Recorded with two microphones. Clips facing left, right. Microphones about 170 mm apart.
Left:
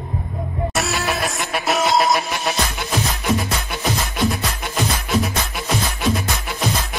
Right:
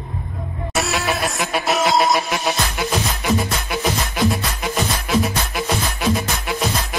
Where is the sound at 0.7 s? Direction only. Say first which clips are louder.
Right 3 dB; centre (ahead or behind).